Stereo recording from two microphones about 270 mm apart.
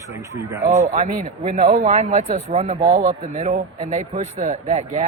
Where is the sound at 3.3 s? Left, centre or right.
Right.